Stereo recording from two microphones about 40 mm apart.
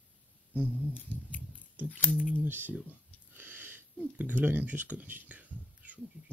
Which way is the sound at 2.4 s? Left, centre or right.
Right.